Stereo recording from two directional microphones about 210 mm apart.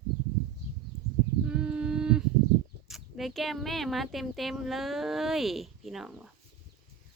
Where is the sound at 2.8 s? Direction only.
Centre (ahead or behind).